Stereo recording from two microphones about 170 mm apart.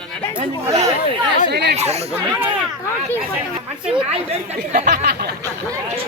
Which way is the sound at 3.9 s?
35° right (ahead or behind).